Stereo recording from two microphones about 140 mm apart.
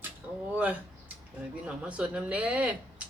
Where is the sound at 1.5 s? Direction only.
10° right (ahead or behind).